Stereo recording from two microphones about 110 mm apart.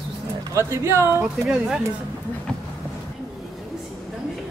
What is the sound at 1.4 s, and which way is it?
Speech, 5° right (ahead or behind).